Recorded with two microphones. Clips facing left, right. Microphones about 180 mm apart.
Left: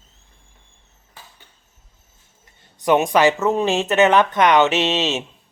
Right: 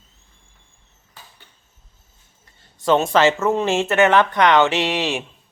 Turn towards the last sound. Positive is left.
turn(degrees=20)  # may be behind; listen again after turning